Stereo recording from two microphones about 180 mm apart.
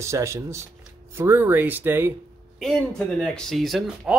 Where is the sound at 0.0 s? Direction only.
15° right (ahead or behind).